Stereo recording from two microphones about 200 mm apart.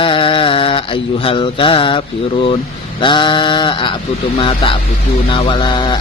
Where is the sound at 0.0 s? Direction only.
25° left (ahead or behind).